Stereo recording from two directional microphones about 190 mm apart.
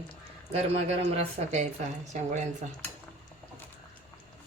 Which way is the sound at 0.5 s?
35° right (ahead or behind).